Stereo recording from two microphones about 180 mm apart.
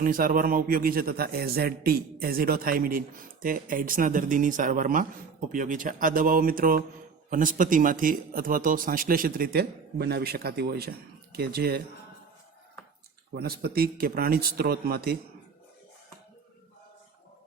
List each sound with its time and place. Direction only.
0.0 s a man's voice: 50° right (ahead or behind)
13.3 s a man's voice: 60° right (ahead or behind)